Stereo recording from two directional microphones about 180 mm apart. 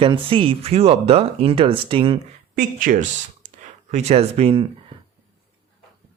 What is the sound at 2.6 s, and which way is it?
Speech, 45° right (ahead or behind).